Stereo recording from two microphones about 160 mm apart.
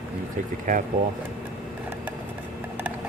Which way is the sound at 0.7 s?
60° right (ahead or behind).